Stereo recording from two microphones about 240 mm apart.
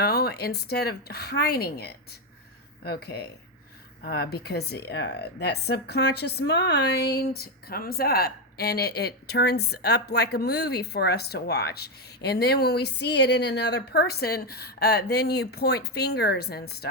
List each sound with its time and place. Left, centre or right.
0.0 s speech: left